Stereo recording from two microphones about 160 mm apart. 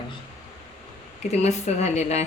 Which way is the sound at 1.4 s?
45° left (ahead or behind).